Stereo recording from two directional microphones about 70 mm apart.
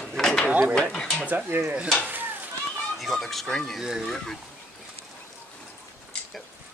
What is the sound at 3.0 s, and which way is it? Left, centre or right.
Speech, centre.